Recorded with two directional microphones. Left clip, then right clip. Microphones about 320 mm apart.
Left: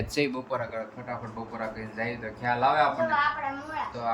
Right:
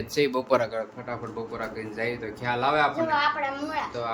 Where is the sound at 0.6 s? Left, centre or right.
Centre.